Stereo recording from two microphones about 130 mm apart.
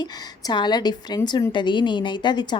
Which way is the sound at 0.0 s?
35° left (ahead or behind).